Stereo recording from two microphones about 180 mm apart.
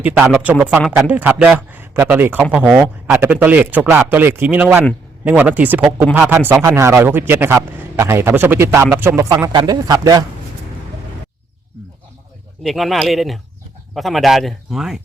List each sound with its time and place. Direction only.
0.0 s a man's voice: 10° right (ahead or behind)
12.6 s speech: centre (ahead or behind)